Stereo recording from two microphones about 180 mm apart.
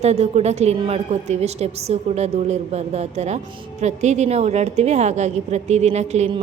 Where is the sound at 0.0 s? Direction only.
35° right (ahead or behind).